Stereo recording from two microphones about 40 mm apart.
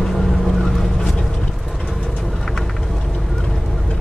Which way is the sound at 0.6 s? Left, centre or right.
Centre.